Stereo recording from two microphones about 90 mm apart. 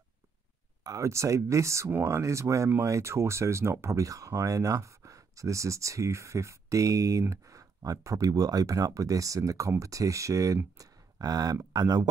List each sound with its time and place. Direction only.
0.8 s speech: 35° right (ahead or behind)